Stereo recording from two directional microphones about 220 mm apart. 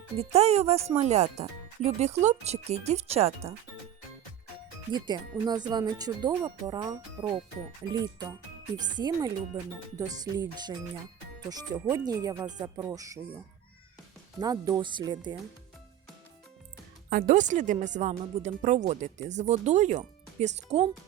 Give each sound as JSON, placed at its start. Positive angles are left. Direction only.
{"t": 0.2, "sound": "speech", "side_deg": -30}
{"t": 4.9, "sound": "speech", "side_deg": -20}
{"t": 14.3, "sound": "speech", "side_deg": -15}
{"t": 17.1, "sound": "speech", "side_deg": -40}